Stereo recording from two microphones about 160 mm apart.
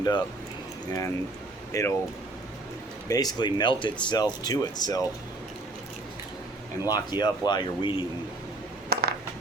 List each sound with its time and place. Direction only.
0.0 s speech: 25° left (ahead or behind)
1.7 s speech: 20° left (ahead or behind)
3.1 s speech: 25° left (ahead or behind)
6.8 s speech: 25° left (ahead or behind)
8.9 s a sound: 75° right (ahead or behind)